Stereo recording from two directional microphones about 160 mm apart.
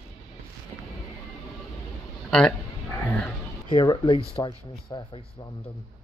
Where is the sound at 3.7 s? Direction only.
30° left (ahead or behind).